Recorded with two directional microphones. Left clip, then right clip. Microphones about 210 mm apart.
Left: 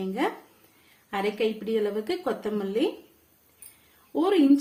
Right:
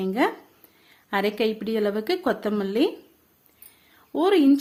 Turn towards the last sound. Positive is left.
turn(degrees=-50)  # may be behind; listen again after turning